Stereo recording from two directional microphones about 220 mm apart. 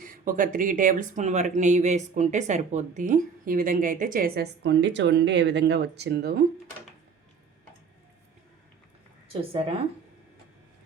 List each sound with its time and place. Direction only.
0.0 s speech: 40° right (ahead or behind)
9.3 s a woman's voice: 25° right (ahead or behind)